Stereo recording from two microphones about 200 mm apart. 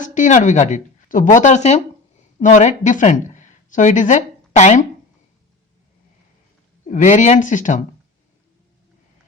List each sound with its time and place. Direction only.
0.0 s speech: 40° left (ahead or behind)
6.8 s speech: 40° left (ahead or behind)